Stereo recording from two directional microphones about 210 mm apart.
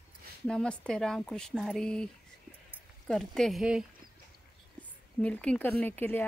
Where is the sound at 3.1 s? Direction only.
5° left (ahead or behind).